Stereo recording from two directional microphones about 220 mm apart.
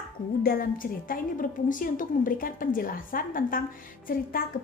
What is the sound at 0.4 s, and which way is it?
A woman's voice, 40° left (ahead or behind).